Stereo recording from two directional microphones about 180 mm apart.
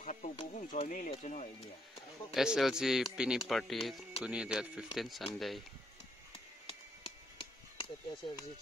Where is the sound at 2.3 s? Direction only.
5° right (ahead or behind).